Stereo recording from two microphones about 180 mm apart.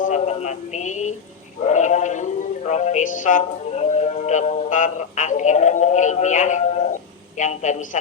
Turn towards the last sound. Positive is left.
turn(degrees=40)  # may be behind; listen again after turning